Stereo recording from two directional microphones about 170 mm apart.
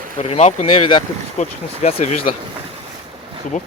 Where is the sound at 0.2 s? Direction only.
40° left (ahead or behind).